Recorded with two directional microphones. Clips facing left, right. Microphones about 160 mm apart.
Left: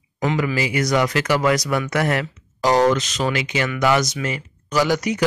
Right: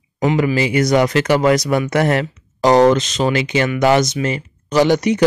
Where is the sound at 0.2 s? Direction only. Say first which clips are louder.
Right 5 dB; 25° right (ahead or behind).